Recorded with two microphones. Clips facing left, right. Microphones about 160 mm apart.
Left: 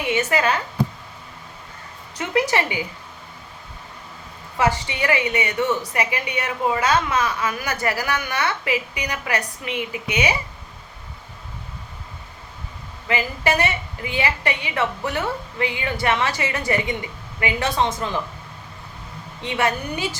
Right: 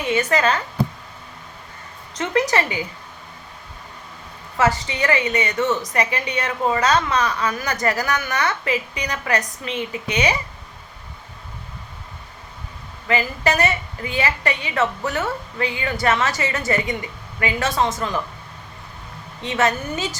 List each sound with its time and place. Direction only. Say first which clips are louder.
0.3 s a woman's voice: right 1 dB; 10° left (ahead or behind)
2.1 s a woman's voice: right 1 dB; 15° left (ahead or behind)
4.9 s a woman's voice: right 1 dB; 15° left (ahead or behind)
13.1 s a woman's voice: right 1 dB; 15° left (ahead or behind)
19.4 s a woman's voice: right 2 dB; 15° left (ahead or behind)